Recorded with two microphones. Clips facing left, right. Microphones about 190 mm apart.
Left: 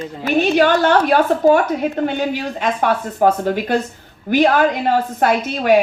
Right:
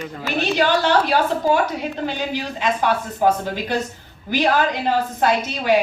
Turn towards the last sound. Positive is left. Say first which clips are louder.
# left 3 dB
turn(degrees=55)  # may be behind; listen again after turning